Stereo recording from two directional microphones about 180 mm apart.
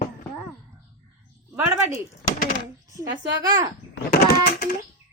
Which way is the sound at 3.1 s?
70° right (ahead or behind).